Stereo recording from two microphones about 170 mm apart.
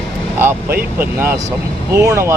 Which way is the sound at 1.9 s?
20° right (ahead or behind).